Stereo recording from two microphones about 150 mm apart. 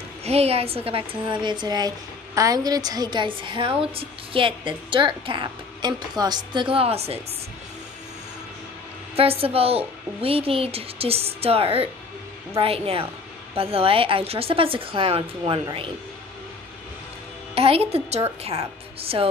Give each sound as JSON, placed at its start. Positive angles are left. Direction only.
{"t": 0.2, "sound": "a woman's voice", "side_deg": -45}
{"t": 9.1, "sound": "a woman's voice", "side_deg": -40}
{"t": 17.6, "sound": "a woman's voice", "side_deg": -40}